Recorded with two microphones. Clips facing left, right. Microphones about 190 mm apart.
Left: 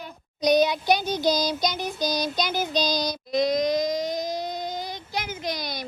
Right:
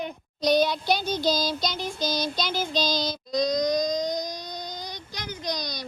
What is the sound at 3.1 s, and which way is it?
Female singing, 25° left (ahead or behind).